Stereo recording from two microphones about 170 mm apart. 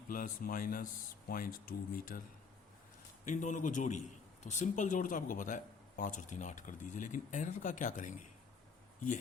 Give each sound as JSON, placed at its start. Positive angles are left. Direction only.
{"t": 0.1, "sound": "speech", "side_deg": 55}
{"t": 3.2, "sound": "a man's voice", "side_deg": 45}